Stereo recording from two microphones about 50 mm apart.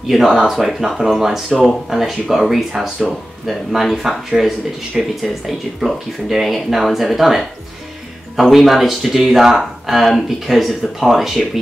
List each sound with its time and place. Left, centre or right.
0.1 s speech: centre